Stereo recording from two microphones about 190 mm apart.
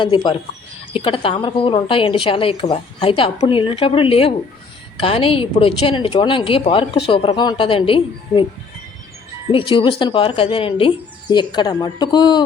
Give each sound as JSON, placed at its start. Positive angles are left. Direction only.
{"t": 0.0, "sound": "speech", "side_deg": 25}
{"t": 9.5, "sound": "speech", "side_deg": 30}